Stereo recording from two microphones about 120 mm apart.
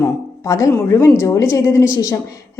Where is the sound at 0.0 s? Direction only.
25° left (ahead or behind).